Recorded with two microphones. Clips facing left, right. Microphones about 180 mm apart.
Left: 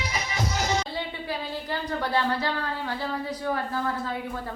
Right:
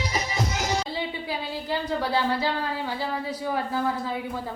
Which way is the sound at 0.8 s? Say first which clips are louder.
Right 2 dB; 10° right (ahead or behind).